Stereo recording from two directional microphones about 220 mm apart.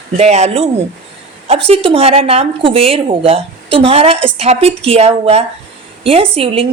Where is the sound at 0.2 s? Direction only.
30° right (ahead or behind).